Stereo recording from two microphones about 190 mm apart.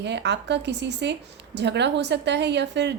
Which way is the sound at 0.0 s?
65° right (ahead or behind).